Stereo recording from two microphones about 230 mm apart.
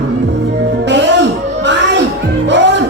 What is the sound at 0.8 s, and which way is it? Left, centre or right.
Music, right.